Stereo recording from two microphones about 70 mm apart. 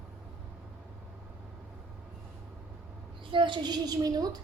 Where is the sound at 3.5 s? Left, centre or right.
Right.